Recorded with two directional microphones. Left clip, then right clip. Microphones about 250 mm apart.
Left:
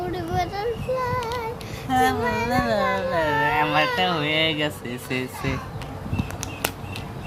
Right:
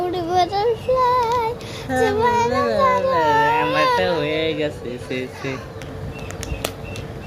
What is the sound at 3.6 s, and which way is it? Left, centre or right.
Baby cry, centre.